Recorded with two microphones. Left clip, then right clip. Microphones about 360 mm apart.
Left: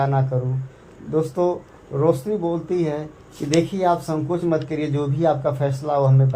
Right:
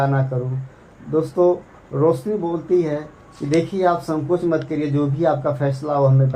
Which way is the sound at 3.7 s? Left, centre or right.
Left.